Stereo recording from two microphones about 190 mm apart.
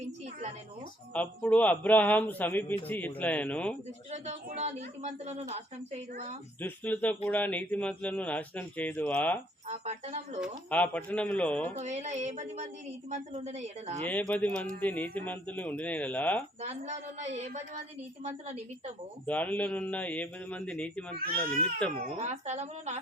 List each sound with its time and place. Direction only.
1.1 s a man's voice: 5° left (ahead or behind)
4.1 s a woman's voice: 35° right (ahead or behind)
6.6 s a man's voice: 10° left (ahead or behind)
9.6 s a woman's voice: 35° right (ahead or behind)
10.7 s a man's voice: 10° left (ahead or behind)
11.7 s a woman's voice: 35° right (ahead or behind)
14.1 s a man's voice: 10° left (ahead or behind)
16.6 s a woman's voice: 35° right (ahead or behind)
19.2 s a man's voice: 10° left (ahead or behind)
21.9 s a woman's voice: 35° right (ahead or behind)